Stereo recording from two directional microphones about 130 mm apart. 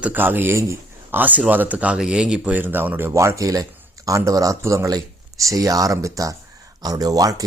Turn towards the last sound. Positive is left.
turn(degrees=-25)  # may be behind; listen again after turning